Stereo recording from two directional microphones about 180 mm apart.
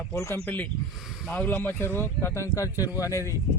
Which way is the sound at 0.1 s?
15° left (ahead or behind).